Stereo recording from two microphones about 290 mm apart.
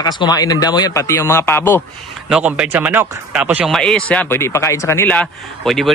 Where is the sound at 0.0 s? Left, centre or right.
Centre.